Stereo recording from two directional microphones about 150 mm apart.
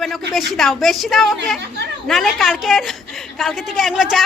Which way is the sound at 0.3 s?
Centre (ahead or behind).